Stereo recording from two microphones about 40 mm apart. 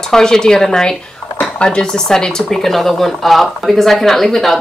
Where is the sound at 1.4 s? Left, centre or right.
Left.